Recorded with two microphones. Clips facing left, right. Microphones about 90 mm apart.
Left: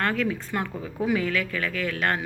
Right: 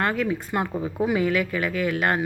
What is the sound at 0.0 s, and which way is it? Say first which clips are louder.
Speech: right 2 dB; 10° right (ahead or behind).